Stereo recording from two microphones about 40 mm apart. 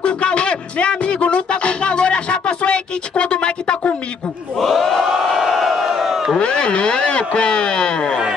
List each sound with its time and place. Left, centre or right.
0.0 s music: left
4.6 s crowd: centre
6.4 s a sound: left